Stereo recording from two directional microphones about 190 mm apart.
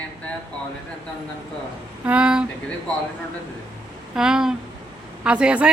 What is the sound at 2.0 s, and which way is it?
Speech, 5° right (ahead or behind).